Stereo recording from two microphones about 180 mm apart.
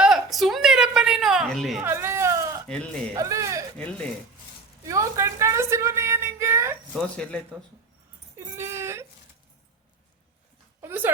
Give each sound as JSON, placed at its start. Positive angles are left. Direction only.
{"t": 0.0, "sound": "a sound", "side_deg": 0}
{"t": 1.8, "sound": "bleat", "side_deg": -10}
{"t": 2.6, "sound": "speech", "side_deg": 5}
{"t": 3.2, "sound": "speech", "side_deg": -15}
{"t": 3.8, "sound": "speech", "side_deg": 5}
{"t": 4.8, "sound": "a woman's voice", "side_deg": -15}
{"t": 6.9, "sound": "speech", "side_deg": 5}
{"t": 8.4, "sound": "a sound", "side_deg": -15}
{"t": 10.8, "sound": "a sound", "side_deg": -10}